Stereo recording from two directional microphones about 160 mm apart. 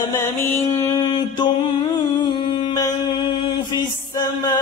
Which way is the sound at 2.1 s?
30° left (ahead or behind).